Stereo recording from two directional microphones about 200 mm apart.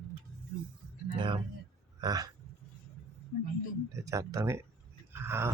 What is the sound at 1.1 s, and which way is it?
Speech, 25° right (ahead or behind).